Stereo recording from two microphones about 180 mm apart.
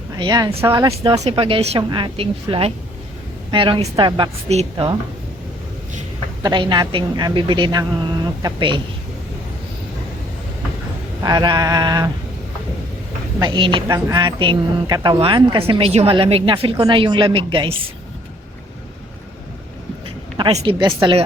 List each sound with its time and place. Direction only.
0.2 s a woman's voice: 20° right (ahead or behind)
1.2 s a woman's voice: 30° right (ahead or behind)
6.4 s a woman's voice: 25° right (ahead or behind)
11.2 s a woman's voice: 20° right (ahead or behind)
13.4 s a woman's voice: 25° right (ahead or behind)
20.3 s a woman's voice: 30° right (ahead or behind)